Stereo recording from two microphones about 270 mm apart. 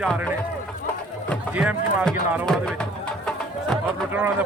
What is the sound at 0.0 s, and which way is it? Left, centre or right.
Speech, centre.